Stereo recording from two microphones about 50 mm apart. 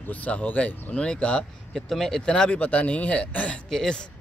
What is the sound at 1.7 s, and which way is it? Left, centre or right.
Speech, centre.